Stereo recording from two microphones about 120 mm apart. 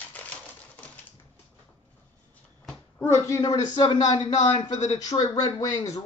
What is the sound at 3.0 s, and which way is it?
A man's voice, 25° left (ahead or behind).